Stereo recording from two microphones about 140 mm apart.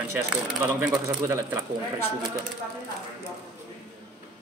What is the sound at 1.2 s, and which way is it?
Speech, 20° right (ahead or behind).